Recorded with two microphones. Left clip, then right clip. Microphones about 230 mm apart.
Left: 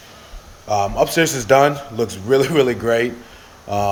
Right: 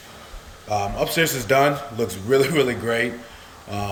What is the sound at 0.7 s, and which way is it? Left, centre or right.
A man's voice, centre.